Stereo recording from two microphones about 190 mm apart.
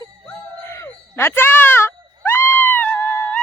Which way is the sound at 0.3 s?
10° left (ahead or behind).